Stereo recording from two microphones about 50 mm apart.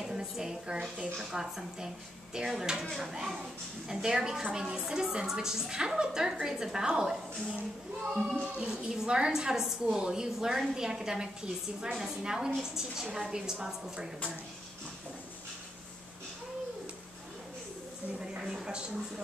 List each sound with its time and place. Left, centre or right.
0.0 s a woman's voice: centre
2.8 s speech: centre
3.1 s a woman's voice: centre
18.4 s a woman's voice: centre